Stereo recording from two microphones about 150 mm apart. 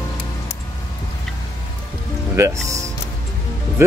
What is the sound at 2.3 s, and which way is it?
Speech, 20° right (ahead or behind).